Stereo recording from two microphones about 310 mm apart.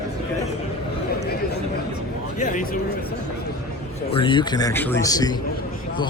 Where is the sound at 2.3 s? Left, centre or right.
Left.